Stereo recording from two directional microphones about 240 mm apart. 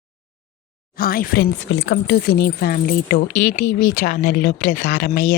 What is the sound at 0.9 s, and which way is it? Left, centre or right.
Speech, left.